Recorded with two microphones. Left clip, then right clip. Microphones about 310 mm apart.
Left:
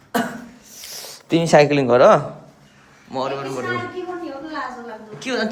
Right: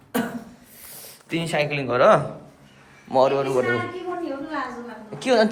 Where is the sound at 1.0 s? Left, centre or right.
Centre.